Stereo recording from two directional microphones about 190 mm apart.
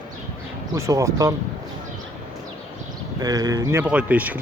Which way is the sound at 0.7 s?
15° right (ahead or behind).